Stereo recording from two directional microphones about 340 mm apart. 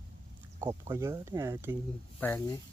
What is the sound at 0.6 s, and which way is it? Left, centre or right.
Speech, centre.